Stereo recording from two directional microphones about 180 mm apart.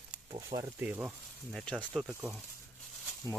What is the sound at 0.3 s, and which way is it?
Speech, 30° right (ahead or behind).